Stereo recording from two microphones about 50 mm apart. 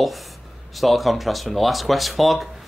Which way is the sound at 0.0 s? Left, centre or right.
Centre.